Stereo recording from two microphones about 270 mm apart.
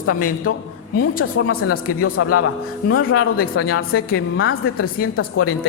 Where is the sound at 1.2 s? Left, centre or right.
Left.